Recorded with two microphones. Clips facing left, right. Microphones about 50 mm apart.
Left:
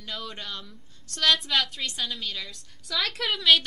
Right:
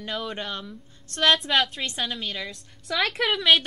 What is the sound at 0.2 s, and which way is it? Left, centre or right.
A woman's voice, right.